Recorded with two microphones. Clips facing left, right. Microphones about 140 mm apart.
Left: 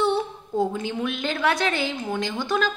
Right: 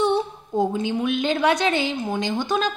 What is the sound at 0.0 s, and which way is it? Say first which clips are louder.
A woman's voice: right 2 dB; 20° right (ahead or behind).